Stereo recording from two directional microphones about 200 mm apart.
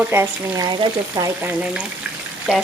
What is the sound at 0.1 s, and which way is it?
Speech, 15° right (ahead or behind).